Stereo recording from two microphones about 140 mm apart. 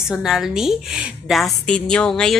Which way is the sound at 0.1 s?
5° right (ahead or behind).